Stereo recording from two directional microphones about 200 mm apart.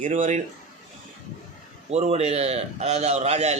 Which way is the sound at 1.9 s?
30° right (ahead or behind).